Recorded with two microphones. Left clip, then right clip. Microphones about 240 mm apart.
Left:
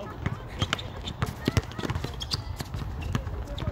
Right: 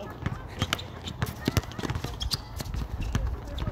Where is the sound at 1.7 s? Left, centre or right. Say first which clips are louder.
Left 1 dB; centre.